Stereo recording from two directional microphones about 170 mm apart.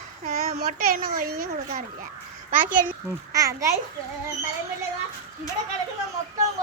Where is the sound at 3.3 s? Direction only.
20° right (ahead or behind).